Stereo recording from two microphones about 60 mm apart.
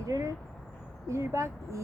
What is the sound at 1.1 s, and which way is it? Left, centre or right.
Speech, right.